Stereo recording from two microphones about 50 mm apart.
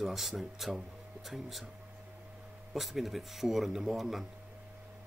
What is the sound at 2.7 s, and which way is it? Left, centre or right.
Speech, centre.